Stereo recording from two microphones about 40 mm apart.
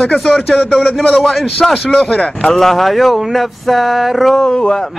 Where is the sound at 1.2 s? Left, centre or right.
Centre.